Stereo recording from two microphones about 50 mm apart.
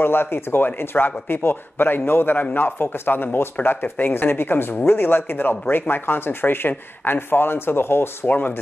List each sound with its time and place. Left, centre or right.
0.0 s speech: left
8.3 s speech: left